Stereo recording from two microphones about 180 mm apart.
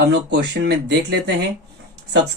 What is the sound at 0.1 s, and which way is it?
Speech, 75° right (ahead or behind).